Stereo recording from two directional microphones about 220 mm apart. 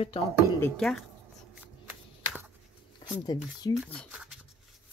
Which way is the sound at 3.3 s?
20° left (ahead or behind).